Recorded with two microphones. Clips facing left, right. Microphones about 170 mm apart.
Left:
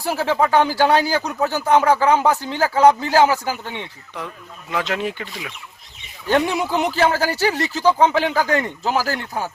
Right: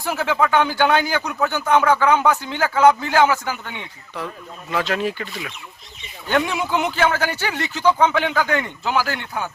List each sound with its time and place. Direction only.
0.0 s speech: 35° left (ahead or behind)
4.7 s speech: 20° left (ahead or behind)
6.2 s speech: 35° left (ahead or behind)